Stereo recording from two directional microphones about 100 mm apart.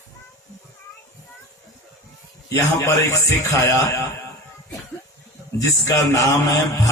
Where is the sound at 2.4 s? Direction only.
35° left (ahead or behind).